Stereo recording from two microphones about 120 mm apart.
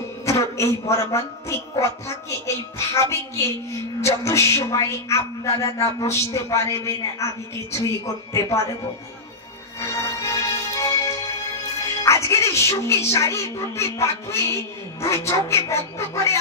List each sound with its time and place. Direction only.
0.2 s a man's voice: 25° left (ahead or behind)
9.8 s music: 25° left (ahead or behind)
12.0 s speech: 25° left (ahead or behind)